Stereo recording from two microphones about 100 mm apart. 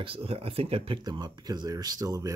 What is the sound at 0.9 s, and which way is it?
Speech, 45° right (ahead or behind).